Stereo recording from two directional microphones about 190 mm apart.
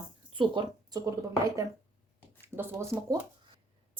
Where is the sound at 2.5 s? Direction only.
15° right (ahead or behind).